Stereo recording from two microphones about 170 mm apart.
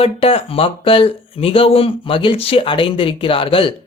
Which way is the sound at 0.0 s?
35° left (ahead or behind).